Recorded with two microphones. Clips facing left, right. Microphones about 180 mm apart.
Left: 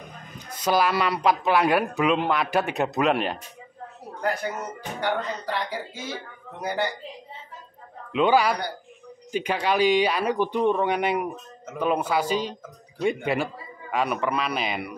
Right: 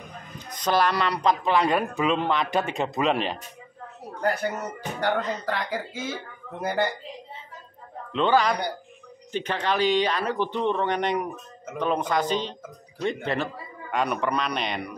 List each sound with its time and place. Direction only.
0.5 s speech: 5° left (ahead or behind)
5.0 s speech: 50° right (ahead or behind)
8.1 s speech: 10° left (ahead or behind)